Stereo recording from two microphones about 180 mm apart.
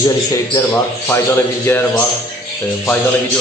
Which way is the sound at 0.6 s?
15° left (ahead or behind).